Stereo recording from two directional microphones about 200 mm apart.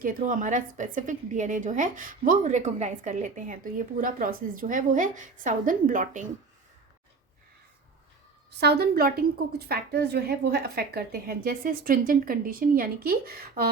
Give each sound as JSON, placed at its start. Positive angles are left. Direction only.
{"t": 0.0, "sound": "a woman's voice", "side_deg": -40}
{"t": 8.4, "sound": "a woman's voice", "side_deg": -55}